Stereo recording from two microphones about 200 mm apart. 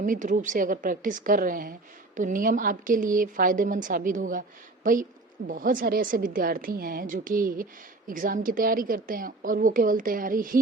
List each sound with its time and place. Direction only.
0.0 s a woman's voice: 40° right (ahead or behind)